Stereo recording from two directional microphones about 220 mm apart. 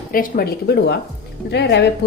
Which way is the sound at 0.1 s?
40° left (ahead or behind).